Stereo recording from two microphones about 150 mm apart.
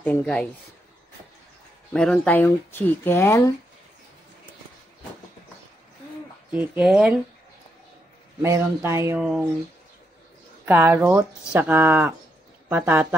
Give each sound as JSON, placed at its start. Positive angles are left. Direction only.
{"t": 0.0, "sound": "speech", "side_deg": 10}
{"t": 1.9, "sound": "speech", "side_deg": 10}
{"t": 6.5, "sound": "speech", "side_deg": -10}
{"t": 8.4, "sound": "speech", "side_deg": -20}
{"t": 10.6, "sound": "speech", "side_deg": -15}